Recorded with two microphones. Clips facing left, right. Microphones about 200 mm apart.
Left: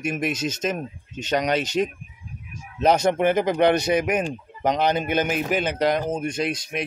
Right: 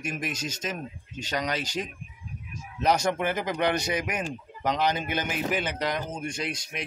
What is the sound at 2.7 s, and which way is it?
Speech, 25° left (ahead or behind).